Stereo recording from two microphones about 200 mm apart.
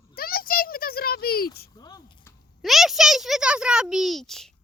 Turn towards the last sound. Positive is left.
turn(degrees=0)  # may be behind; listen again after turning